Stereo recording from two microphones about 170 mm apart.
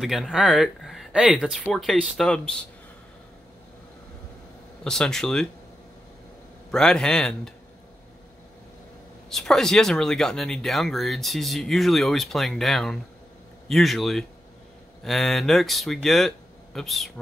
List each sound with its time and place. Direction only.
0.0 s speech: centre (ahead or behind)
4.8 s speech: 5° left (ahead or behind)
6.7 s speech: 5° left (ahead or behind)
9.3 s speech: 5° left (ahead or behind)